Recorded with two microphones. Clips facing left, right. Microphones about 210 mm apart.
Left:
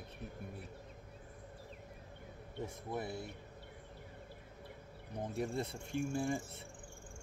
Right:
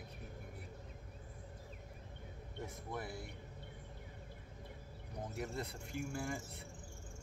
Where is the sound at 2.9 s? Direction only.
25° left (ahead or behind).